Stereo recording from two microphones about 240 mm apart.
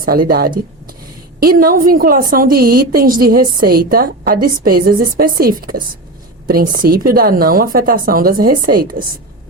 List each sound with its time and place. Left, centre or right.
0.0 s a woman's voice: right